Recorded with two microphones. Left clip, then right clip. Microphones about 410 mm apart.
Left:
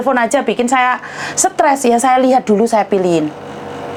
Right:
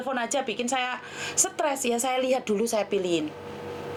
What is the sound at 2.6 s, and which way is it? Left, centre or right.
Speech, left.